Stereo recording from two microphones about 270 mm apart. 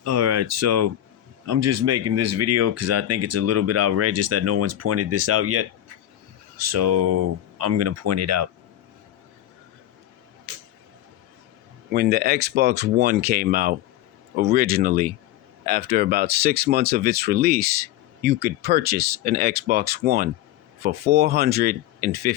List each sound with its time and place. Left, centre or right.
0.0 s speech: right
6.7 s speech: right
11.9 s speech: right